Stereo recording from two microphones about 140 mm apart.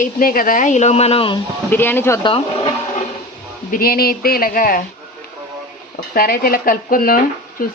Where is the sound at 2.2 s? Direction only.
40° left (ahead or behind).